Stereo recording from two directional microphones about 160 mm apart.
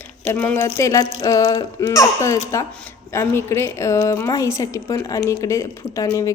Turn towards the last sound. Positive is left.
turn(degrees=20)  # may be behind; listen again after turning